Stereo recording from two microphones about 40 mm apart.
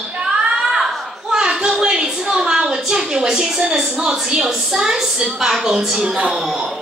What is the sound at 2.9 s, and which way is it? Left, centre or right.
A woman's voice, centre.